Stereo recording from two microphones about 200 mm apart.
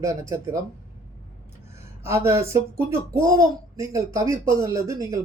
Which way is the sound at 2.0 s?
15° right (ahead or behind).